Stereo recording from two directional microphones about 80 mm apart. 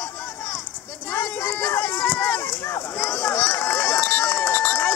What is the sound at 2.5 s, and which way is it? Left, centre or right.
Run, left.